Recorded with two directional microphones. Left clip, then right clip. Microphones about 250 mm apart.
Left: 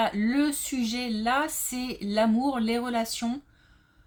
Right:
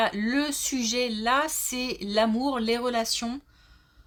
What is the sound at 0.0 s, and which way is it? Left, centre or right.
Speech, right.